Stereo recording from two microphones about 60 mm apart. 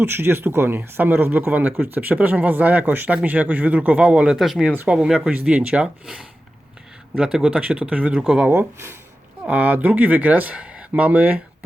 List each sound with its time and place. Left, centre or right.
0.0 s speech: right; by 4.4 s centre
4.4 s speech: centre
4.9 s speech: centre
8.5 s speech: right
9.4 s speech: right